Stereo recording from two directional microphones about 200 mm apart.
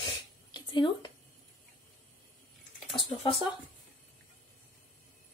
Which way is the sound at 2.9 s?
25° left (ahead or behind).